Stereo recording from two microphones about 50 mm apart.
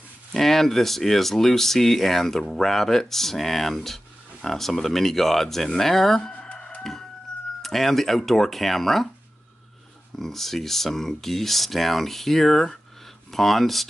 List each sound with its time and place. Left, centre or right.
0.3 s speech: centre
6.4 s chicken: left
6.8 s chicken: centre
7.6 s speech: centre
10.1 s speech: centre